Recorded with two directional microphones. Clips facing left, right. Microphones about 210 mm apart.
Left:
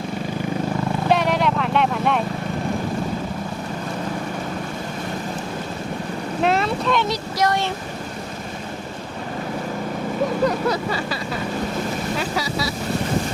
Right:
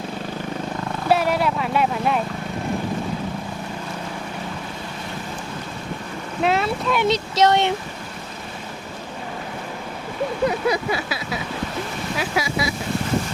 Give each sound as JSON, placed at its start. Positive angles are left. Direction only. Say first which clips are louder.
{"t": 1.0, "sound": "vehicle", "louder": "right 1 dB", "side_deg": -5}
{"t": 6.4, "sound": "boat", "louder": "even", "side_deg": 0}
{"t": 7.0, "sound": "speech", "louder": "right 4 dB", "side_deg": -25}
{"t": 10.4, "sound": "vehicle", "louder": "right 3 dB", "side_deg": -10}
{"t": 12.1, "sound": "speech", "louder": "even", "side_deg": -10}